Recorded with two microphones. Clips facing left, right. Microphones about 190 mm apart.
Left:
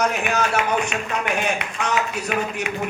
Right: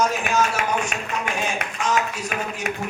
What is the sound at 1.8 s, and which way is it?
Speech, 65° left (ahead or behind).